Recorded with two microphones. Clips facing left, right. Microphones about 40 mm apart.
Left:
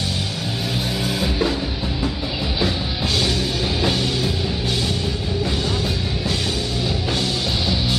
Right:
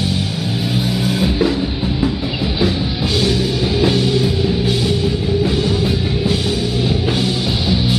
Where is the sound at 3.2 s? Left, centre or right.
Centre.